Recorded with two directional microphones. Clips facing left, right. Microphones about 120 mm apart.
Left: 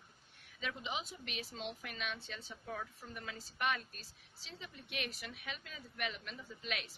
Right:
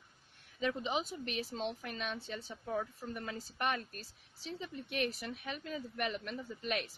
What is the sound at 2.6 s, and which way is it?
A woman's voice, 30° right (ahead or behind).